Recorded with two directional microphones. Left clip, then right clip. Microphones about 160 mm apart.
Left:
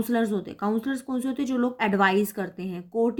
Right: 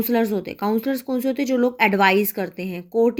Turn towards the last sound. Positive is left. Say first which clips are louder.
# right 6 dB
turn(degrees=-15)  # may be behind; listen again after turning